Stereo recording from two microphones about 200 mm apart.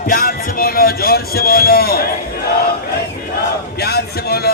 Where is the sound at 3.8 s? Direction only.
50° left (ahead or behind).